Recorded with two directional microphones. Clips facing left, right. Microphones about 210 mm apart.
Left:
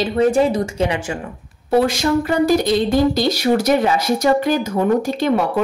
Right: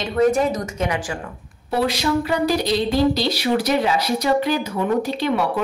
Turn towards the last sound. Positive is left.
turn(degrees=45)  # may be behind; listen again after turning